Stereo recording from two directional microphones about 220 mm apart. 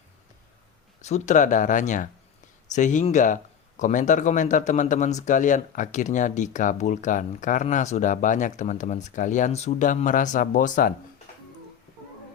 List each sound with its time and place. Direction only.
1.0 s speech: 30° left (ahead or behind)